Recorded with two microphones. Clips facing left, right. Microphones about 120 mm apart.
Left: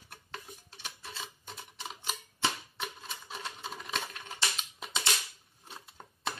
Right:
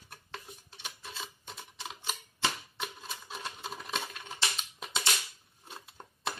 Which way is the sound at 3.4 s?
5° right (ahead or behind).